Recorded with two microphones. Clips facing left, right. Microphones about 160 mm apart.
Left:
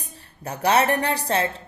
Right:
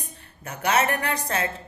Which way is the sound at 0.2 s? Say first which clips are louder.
Left 6 dB; 35° left (ahead or behind).